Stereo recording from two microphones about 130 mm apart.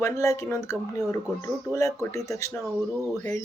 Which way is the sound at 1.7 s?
25° left (ahead or behind).